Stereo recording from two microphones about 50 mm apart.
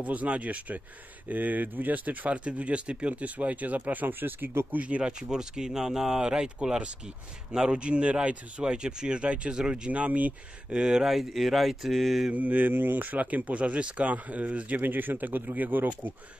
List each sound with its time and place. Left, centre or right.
0.0 s speech: right
4.7 s speech: right
7.9 s speech: right
10.7 s speech: centre
12.3 s speech: right
14.8 s speech: right